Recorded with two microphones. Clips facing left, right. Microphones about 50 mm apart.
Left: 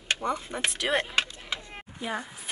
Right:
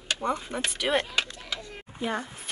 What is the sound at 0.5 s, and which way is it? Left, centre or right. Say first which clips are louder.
Speech: even; centre.